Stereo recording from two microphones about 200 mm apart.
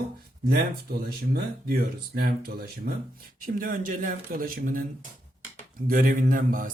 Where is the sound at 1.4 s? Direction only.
50° right (ahead or behind).